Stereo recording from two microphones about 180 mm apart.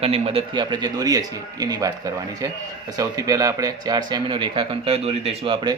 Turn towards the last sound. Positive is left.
turn(degrees=-25)  # may be behind; listen again after turning